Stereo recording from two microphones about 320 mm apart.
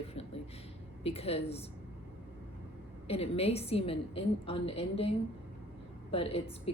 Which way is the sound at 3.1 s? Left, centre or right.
Centre.